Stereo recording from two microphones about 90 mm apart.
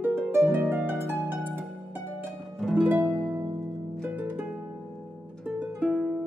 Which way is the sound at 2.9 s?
25° right (ahead or behind).